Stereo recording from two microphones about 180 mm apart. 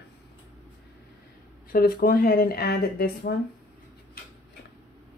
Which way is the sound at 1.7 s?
55° left (ahead or behind).